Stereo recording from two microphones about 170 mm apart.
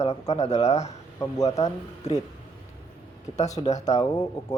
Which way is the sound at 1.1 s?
20° left (ahead or behind).